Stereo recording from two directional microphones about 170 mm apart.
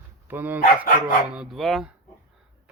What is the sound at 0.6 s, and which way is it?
Speech, 55° left (ahead or behind).